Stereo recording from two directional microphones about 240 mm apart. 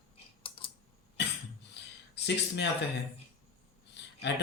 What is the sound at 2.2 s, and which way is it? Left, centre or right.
Speech, left.